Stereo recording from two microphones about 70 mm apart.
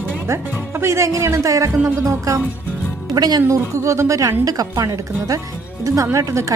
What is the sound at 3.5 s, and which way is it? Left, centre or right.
Speech, right.